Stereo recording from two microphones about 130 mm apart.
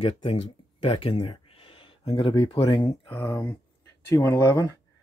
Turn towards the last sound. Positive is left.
turn(degrees=20)  # may be behind; listen again after turning